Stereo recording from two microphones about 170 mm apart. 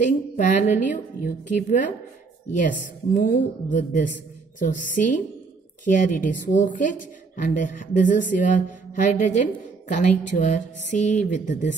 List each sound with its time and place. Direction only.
0.0 s a woman's voice: 45° left (ahead or behind)
3.2 s a woman's voice: 50° left (ahead or behind)